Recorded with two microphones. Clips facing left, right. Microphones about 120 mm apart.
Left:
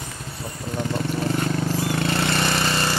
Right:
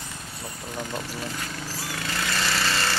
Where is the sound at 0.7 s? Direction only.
30° left (ahead or behind).